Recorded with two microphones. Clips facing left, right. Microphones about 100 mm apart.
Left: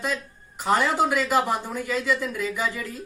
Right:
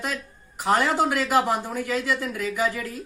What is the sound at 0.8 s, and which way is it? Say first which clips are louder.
Speech: even; centre (ahead or behind).